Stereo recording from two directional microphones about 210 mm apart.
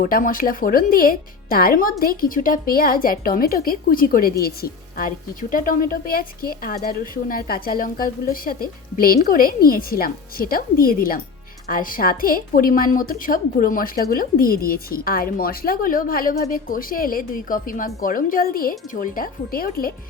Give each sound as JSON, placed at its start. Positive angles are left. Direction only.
{"t": 0.0, "sound": "speech", "side_deg": 40}